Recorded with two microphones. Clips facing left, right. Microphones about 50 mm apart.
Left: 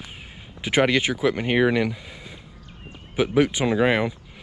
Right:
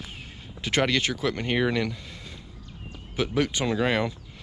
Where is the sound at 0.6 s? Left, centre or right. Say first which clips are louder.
Left 4 dB; centre.